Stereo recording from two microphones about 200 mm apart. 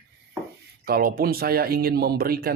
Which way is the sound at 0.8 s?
50° right (ahead or behind).